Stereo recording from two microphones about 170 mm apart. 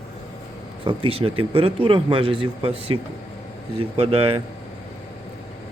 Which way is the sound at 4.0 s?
35° right (ahead or behind).